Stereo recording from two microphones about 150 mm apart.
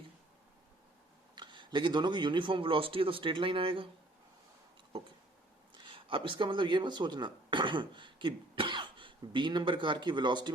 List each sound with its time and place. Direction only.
1.4 s a man's voice: 30° right (ahead or behind)
5.7 s speech: 35° right (ahead or behind)